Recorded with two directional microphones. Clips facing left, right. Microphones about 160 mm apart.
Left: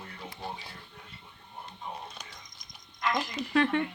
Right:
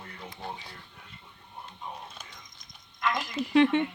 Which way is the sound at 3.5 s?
20° right (ahead or behind).